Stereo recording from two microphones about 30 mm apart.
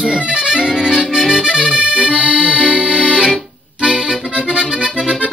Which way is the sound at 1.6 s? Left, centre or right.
Right.